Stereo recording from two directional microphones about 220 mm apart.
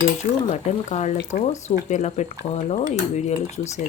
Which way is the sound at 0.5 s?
30° left (ahead or behind).